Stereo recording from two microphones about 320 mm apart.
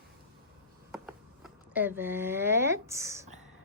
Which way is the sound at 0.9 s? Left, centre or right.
Centre.